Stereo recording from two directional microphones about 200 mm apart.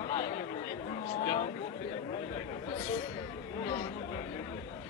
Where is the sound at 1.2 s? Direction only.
25° left (ahead or behind).